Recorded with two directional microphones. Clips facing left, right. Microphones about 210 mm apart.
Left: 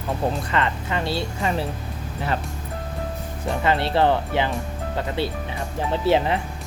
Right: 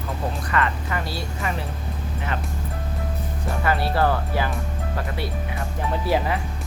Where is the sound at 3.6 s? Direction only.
25° left (ahead or behind).